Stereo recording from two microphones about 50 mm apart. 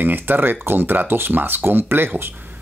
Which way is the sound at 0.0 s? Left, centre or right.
Right.